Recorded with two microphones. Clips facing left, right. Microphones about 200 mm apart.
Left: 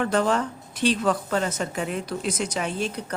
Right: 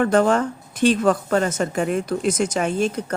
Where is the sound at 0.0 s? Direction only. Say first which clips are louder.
Right 5 dB; 50° right (ahead or behind).